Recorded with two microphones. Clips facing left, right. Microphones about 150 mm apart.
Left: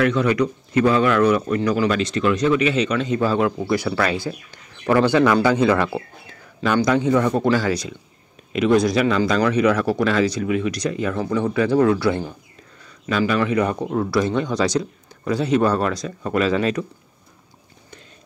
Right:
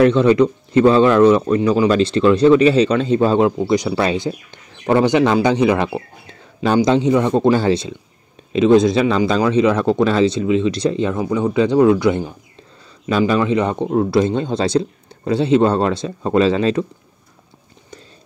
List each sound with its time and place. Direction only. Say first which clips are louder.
0.0 s a man's voice: right 6 dB; 30° right (ahead or behind)